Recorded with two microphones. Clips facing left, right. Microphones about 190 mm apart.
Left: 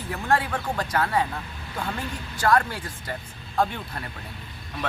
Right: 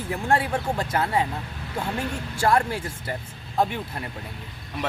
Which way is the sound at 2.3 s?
25° right (ahead or behind).